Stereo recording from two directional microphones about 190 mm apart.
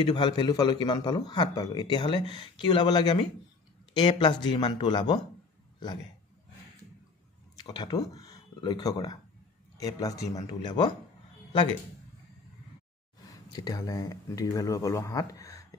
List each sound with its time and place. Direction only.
0.0 s a man's voice: 25° left (ahead or behind)
7.5 s a man's voice: 20° left (ahead or behind)
13.2 s speech: 20° left (ahead or behind)